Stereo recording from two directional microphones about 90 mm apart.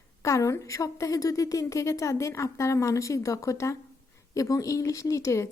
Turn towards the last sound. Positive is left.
turn(degrees=35)  # may be behind; listen again after turning